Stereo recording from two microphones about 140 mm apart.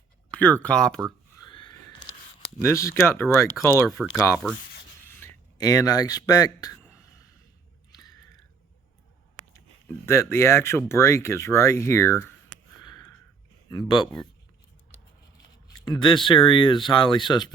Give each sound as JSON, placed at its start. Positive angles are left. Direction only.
{"t": 0.3, "sound": "speech", "side_deg": 10}
{"t": 1.4, "sound": "a sound", "side_deg": 35}
{"t": 2.6, "sound": "speech", "side_deg": 20}
{"t": 4.0, "sound": "speech", "side_deg": -5}
{"t": 5.0, "sound": "a sound", "side_deg": 20}
{"t": 10.1, "sound": "speech", "side_deg": 20}
{"t": 12.8, "sound": "a sound", "side_deg": 30}
{"t": 13.8, "sound": "speech", "side_deg": 35}
{"t": 15.9, "sound": "speech", "side_deg": 35}